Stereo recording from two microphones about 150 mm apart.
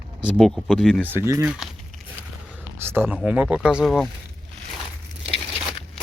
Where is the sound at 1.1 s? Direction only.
20° right (ahead or behind).